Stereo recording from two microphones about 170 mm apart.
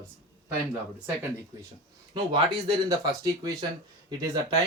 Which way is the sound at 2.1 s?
25° right (ahead or behind).